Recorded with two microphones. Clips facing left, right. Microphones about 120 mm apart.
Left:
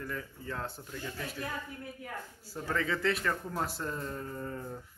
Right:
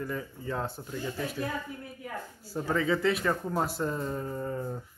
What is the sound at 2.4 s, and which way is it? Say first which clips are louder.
Speech: right 5 dB; 15° right (ahead or behind).